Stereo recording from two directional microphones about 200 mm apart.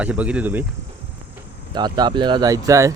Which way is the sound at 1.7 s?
20° right (ahead or behind).